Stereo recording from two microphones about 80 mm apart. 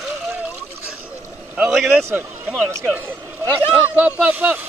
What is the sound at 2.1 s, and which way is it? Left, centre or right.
Speech, right.